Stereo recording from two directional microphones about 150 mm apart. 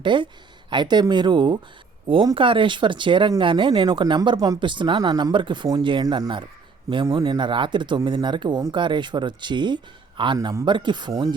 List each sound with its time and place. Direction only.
0.0 s speech: 35° right (ahead or behind)
10.3 s speech: 20° right (ahead or behind)